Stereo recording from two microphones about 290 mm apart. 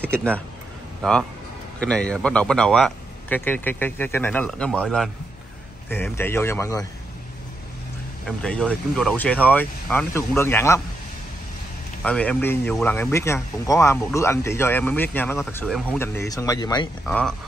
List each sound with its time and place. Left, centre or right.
0.0 s speech: centre
1.8 s a man's voice: centre
8.3 s a man's voice: centre
12.0 s speech: centre
17.0 s a man's voice: centre